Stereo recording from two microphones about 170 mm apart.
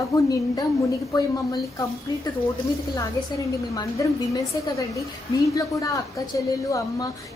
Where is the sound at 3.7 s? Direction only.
20° left (ahead or behind).